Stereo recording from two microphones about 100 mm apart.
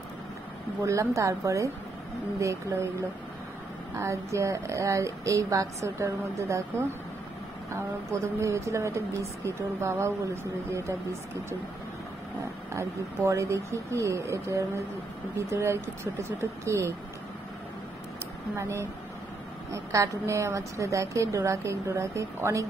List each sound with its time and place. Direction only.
0.8 s a woman's voice: 30° right (ahead or behind)
7.7 s speech: 30° right (ahead or behind)
12.4 s a woman's voice: 35° right (ahead or behind)
18.6 s a woman's voice: 25° right (ahead or behind)